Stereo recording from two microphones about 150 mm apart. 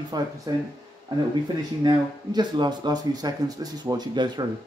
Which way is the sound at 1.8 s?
30° right (ahead or behind).